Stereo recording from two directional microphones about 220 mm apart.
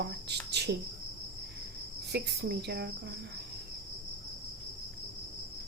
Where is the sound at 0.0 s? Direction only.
50° right (ahead or behind).